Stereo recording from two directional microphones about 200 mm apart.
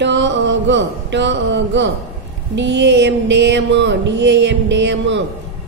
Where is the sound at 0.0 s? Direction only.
65° right (ahead or behind).